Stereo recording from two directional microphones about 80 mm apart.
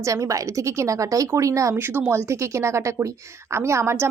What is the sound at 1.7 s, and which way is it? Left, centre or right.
A woman's voice, right.